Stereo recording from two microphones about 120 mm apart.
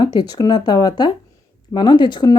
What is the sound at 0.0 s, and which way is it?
Speech, 35° left (ahead or behind).